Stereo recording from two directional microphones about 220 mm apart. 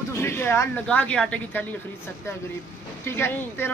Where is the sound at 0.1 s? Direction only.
10° left (ahead or behind).